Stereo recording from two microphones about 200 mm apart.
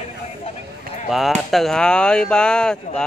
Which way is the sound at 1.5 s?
Centre (ahead or behind).